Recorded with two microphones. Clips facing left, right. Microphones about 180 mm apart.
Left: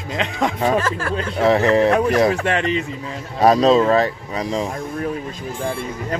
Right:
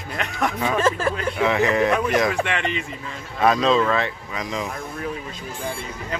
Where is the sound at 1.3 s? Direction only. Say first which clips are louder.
Left 7 dB; 35° left (ahead or behind).